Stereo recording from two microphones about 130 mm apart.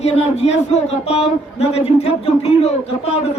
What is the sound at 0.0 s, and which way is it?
A man's voice, 55° left (ahead or behind).